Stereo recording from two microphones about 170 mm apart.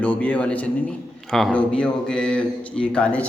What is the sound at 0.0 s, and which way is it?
A man's voice, 10° left (ahead or behind).